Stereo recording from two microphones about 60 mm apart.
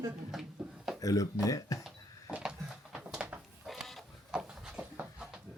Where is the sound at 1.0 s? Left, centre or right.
Left.